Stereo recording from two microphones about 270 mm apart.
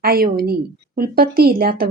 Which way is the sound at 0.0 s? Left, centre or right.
Right.